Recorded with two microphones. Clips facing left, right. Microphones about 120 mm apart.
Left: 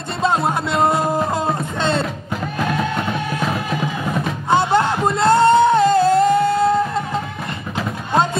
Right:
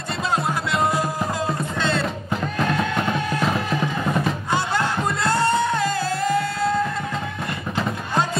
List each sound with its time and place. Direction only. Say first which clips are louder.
0.2 s music: left 6 dB; 25° left (ahead or behind)
2.6 s music: left 2 dB; centre (ahead or behind)
4.5 s music: left 12 dB; 25° left (ahead or behind)